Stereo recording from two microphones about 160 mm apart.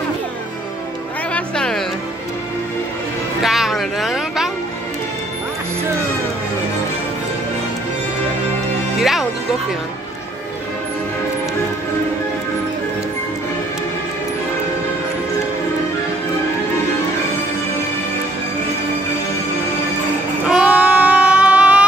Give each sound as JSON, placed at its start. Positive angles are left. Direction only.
{"t": 1.3, "sound": "music", "side_deg": 5}
{"t": 3.4, "sound": "a sound", "side_deg": 0}
{"t": 8.9, "sound": "music", "side_deg": 0}
{"t": 20.4, "sound": "child singing", "side_deg": -10}